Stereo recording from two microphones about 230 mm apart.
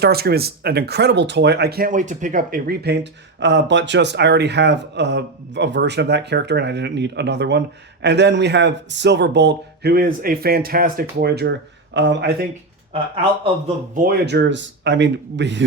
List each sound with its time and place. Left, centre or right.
0.0 s speech: right
13.9 s speech: right